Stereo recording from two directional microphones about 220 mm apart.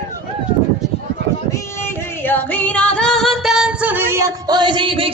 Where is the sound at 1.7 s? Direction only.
10° left (ahead or behind).